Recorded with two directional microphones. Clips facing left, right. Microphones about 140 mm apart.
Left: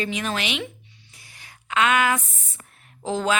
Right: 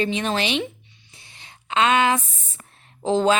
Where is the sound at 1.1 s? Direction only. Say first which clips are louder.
Right 2 dB; 25° right (ahead or behind).